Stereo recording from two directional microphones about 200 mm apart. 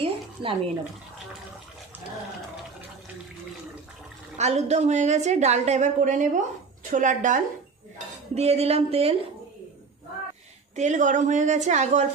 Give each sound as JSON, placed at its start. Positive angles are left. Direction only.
{"t": 0.0, "sound": "a sound", "side_deg": -25}
{"t": 4.4, "sound": "a woman's voice", "side_deg": -35}
{"t": 10.8, "sound": "a woman's voice", "side_deg": -35}